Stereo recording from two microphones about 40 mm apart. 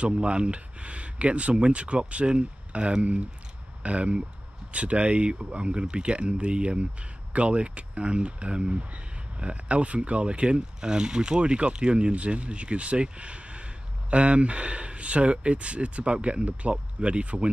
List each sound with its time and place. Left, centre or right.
0.0 s speech: right